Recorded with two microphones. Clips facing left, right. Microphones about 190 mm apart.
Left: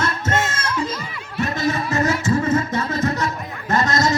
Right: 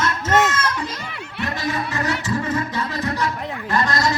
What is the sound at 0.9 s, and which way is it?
Music, 70° right (ahead or behind).